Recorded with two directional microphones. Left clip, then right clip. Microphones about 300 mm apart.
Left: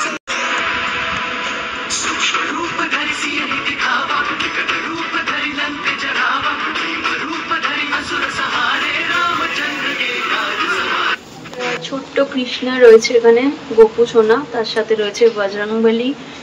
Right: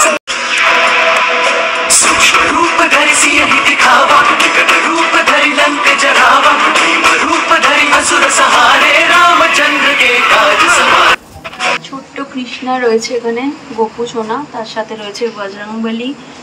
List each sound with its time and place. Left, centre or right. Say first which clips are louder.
0.0 s music: right 8 dB; right